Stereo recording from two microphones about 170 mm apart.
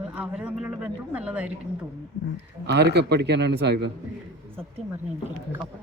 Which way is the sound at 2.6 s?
80° right.